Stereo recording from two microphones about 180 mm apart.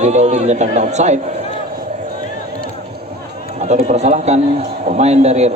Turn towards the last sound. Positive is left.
turn(degrees=-35)  # may be behind; listen again after turning